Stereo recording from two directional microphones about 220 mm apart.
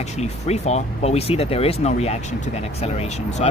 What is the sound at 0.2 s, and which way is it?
Speech, 30° left (ahead or behind).